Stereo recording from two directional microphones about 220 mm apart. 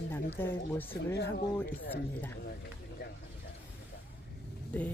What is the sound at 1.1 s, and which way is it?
Speech, 50° left (ahead or behind).